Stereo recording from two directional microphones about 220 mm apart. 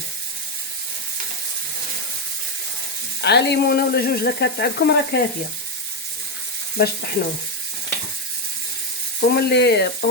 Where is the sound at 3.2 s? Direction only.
50° left (ahead or behind).